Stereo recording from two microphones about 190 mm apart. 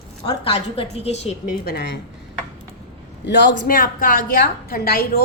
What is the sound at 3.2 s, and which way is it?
A woman's voice, 60° left (ahead or behind).